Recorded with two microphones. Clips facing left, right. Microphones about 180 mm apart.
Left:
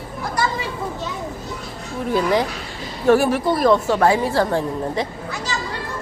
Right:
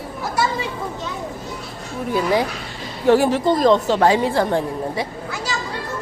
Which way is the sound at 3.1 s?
20° right (ahead or behind).